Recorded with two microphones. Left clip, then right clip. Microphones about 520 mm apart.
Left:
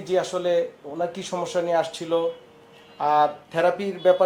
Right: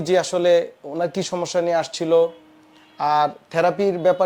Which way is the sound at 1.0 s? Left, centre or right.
Right.